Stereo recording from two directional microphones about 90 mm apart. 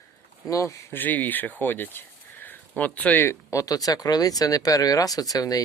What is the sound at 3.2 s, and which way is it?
Speech, 40° left (ahead or behind).